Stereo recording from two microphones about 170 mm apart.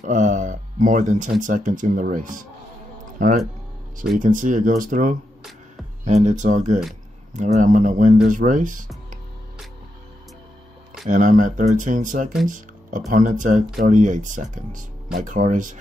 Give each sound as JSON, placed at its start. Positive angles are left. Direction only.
{"t": 0.0, "sound": "a sound", "side_deg": -45}
{"t": 1.4, "sound": "speech", "side_deg": -50}
{"t": 11.1, "sound": "speech", "side_deg": -50}